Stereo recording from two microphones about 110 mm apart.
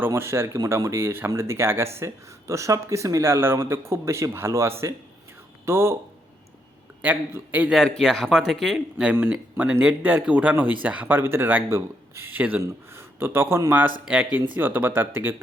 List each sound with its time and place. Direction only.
0.0 s speech: 25° right (ahead or behind)
7.0 s speech: 15° right (ahead or behind)
7.7 s speech: 5° left (ahead or behind); by 15.4 s 20° right (ahead or behind)